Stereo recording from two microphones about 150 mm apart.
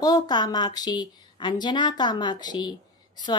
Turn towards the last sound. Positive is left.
turn(degrees=30)  # may be behind; listen again after turning